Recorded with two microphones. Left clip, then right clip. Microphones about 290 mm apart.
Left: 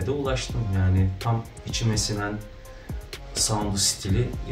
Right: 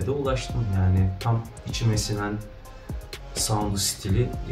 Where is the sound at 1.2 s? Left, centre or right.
Centre.